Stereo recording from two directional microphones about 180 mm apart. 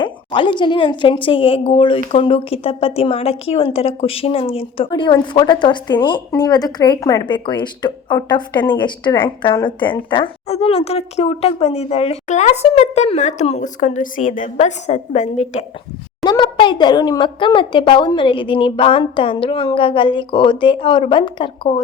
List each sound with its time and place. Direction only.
0.0 s a woman's voice: 25° left (ahead or behind)
16.2 s a woman's voice: 25° left (ahead or behind)